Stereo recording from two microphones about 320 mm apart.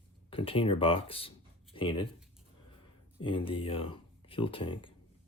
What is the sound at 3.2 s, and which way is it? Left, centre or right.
Speech, centre.